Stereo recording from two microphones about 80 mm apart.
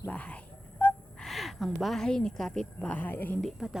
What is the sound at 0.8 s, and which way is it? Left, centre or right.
Gasp, left.